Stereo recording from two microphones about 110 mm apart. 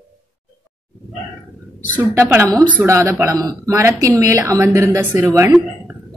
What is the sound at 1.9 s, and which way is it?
A woman's voice, 15° right (ahead or behind).